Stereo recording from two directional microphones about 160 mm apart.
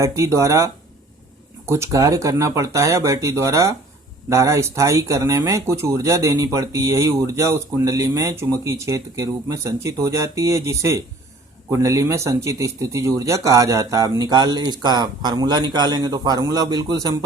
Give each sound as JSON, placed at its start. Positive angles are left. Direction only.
{"t": 0.0, "sound": "speech", "side_deg": -20}